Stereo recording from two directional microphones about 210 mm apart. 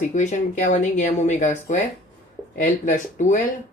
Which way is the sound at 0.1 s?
35° left (ahead or behind).